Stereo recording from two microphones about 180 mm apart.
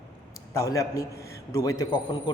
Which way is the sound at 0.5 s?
20° left (ahead or behind).